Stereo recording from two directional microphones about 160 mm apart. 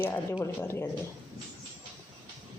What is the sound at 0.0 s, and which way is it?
Speech, 15° left (ahead or behind).